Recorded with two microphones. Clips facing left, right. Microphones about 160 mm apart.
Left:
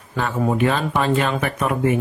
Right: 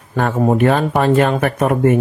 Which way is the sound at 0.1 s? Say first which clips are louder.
Right 6 dB; 50° right (ahead or behind).